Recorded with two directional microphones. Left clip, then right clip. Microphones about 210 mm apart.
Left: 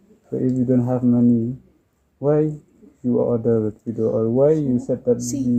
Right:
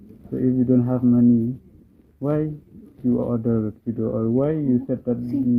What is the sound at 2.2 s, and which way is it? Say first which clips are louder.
Speech: left 5 dB; 40° left (ahead or behind).